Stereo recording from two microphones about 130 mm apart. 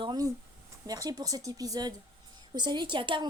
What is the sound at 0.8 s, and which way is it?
A woman's voice, 30° right (ahead or behind).